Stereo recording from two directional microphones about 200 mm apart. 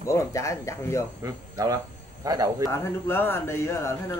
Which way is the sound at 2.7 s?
10° left (ahead or behind).